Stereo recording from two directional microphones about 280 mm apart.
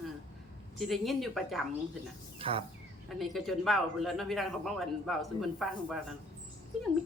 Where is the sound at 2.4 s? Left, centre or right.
Centre.